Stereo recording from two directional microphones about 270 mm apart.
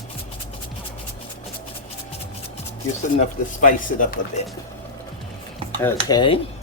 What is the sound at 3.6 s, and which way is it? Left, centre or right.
Speech, left.